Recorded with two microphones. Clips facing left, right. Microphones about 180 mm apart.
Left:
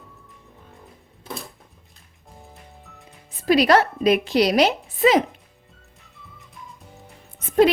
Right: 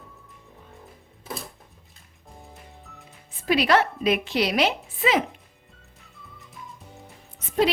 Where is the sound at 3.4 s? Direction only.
40° left (ahead or behind).